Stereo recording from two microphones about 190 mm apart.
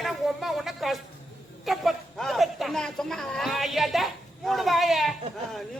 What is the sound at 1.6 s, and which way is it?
Speech, centre (ahead or behind).